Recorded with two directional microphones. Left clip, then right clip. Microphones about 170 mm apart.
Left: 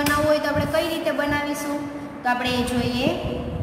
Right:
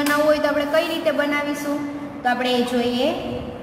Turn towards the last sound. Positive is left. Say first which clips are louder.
# right 4 dB
turn(degrees=-35)  # may be behind; listen again after turning